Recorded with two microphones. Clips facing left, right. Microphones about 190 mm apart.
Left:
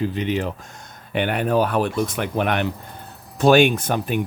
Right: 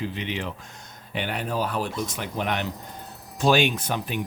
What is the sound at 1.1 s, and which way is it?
Speech, 60° left (ahead or behind).